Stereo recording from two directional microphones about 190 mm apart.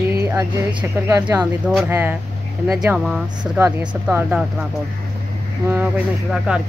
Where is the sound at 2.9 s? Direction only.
5° right (ahead or behind).